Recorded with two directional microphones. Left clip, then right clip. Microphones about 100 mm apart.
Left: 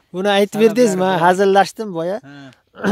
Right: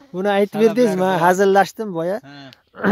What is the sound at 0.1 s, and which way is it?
Speech, 5° left (ahead or behind).